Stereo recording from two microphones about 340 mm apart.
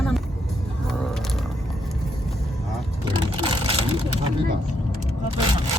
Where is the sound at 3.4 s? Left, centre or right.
Centre.